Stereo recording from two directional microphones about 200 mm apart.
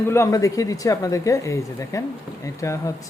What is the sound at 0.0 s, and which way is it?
Speech, 15° left (ahead or behind).